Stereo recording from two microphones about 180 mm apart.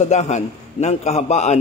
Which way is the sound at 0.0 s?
40° left (ahead or behind).